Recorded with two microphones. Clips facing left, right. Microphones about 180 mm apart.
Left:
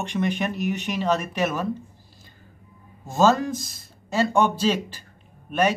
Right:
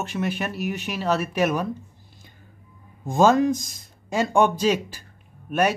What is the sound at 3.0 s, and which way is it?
Speech, 15° right (ahead or behind).